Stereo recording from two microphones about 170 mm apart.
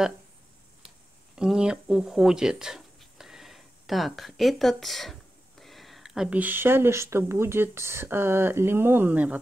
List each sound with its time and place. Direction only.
1.3 s speech: 5° right (ahead or behind)